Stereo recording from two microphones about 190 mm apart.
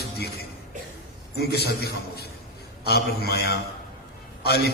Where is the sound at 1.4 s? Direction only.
60° left (ahead or behind).